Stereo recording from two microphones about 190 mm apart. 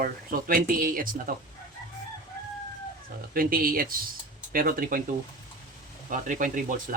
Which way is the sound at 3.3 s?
50° right (ahead or behind).